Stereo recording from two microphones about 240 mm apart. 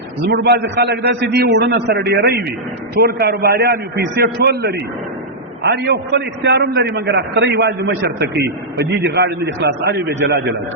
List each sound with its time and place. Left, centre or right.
0.2 s a man's voice: right